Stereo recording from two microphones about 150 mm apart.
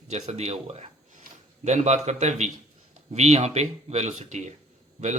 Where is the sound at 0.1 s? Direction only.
45° right (ahead or behind).